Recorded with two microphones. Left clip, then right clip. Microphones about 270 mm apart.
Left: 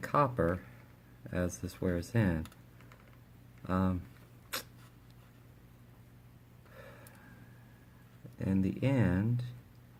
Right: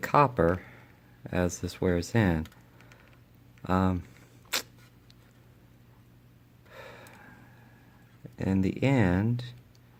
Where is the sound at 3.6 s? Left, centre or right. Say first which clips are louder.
Right 7 dB; right.